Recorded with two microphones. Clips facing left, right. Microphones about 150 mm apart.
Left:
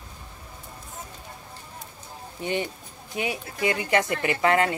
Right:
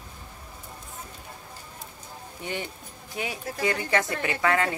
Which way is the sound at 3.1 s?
20° left (ahead or behind).